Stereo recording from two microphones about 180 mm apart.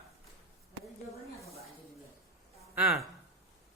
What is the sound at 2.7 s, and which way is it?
Speech, centre (ahead or behind).